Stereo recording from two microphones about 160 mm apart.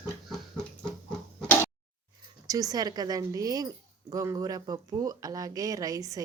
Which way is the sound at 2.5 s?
25° right (ahead or behind).